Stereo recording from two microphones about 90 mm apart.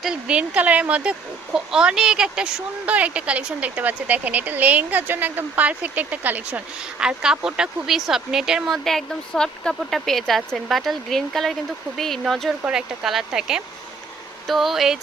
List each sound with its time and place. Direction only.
0.0 s a woman's voice: 10° right (ahead or behind)